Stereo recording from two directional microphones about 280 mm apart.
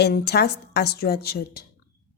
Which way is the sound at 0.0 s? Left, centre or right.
Left.